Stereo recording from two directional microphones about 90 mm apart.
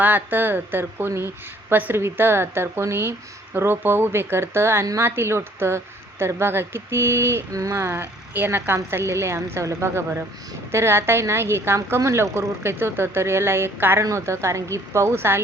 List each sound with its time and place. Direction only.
0.0 s a woman's voice: 20° right (ahead or behind)
7.5 s speech: 40° right (ahead or behind)
7.8 s a woman's voice: 25° right (ahead or behind)